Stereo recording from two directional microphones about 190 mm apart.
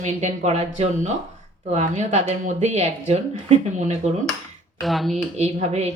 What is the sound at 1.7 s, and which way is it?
Speech, 35° right (ahead or behind).